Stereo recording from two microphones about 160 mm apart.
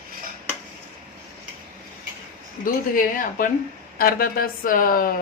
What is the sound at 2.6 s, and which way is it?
Speech, 60° left (ahead or behind).